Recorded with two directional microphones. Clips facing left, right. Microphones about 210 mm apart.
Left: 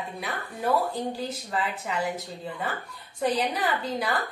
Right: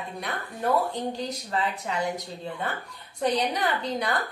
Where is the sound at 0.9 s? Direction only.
5° left (ahead or behind).